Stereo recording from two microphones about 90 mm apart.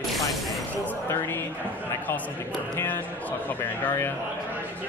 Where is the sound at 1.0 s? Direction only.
25° left (ahead or behind).